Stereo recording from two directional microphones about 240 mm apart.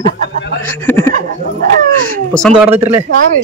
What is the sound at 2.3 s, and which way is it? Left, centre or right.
Speech, centre.